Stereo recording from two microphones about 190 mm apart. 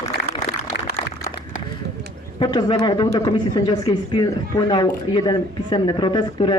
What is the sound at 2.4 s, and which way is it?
Speech, 25° left (ahead or behind).